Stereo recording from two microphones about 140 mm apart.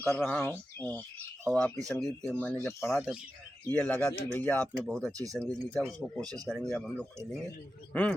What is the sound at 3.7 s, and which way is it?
Speech, 10° left (ahead or behind).